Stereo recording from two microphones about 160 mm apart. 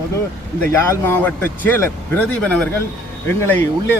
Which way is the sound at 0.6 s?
15° left (ahead or behind).